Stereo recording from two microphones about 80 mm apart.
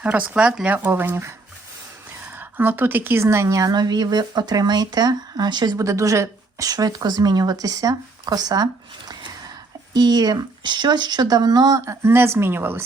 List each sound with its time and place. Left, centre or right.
0.0 s speech: centre
0.8 s speech: right
5.7 s speech: right
11.9 s a woman's voice: right